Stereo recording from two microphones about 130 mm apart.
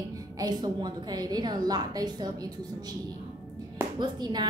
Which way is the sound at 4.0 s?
35° right (ahead or behind).